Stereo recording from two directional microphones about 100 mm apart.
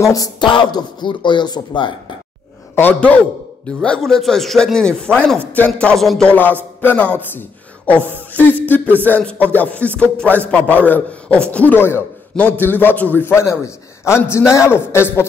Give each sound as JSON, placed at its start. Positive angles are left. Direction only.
{"t": 0.0, "sound": "a sound", "side_deg": 35}
{"t": 0.4, "sound": "speech", "side_deg": 50}
{"t": 2.7, "sound": "a man's voice", "side_deg": 15}
{"t": 5.0, "sound": "music", "side_deg": 10}
{"t": 6.0, "sound": "a man's voice", "side_deg": 5}
{"t": 6.8, "sound": "a man's voice", "side_deg": 15}
{"t": 9.0, "sound": "music", "side_deg": 15}
{"t": 11.4, "sound": "a man's voice", "side_deg": 15}